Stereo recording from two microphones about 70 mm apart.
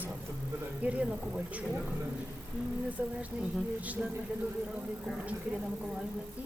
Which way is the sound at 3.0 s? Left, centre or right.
Right.